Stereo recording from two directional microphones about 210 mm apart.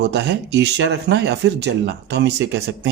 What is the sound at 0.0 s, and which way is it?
Speech, 55° right (ahead or behind).